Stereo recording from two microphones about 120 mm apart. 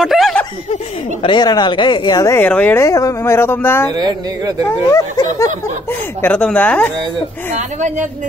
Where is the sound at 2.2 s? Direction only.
20° left (ahead or behind).